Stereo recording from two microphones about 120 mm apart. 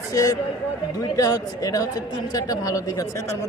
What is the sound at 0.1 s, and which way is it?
A man's voice, 30° left (ahead or behind).